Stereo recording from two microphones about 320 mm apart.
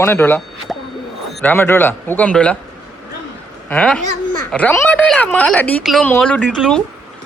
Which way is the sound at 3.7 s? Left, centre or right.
Centre.